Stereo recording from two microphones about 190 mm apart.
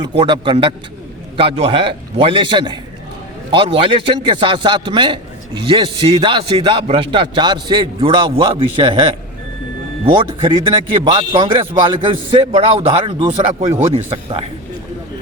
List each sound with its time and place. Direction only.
0.2 s a man's voice: 25° right (ahead or behind)
10.1 s a man's voice: 25° right (ahead or behind)